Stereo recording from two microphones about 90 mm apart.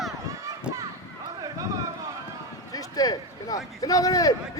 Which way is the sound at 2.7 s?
45° left (ahead or behind).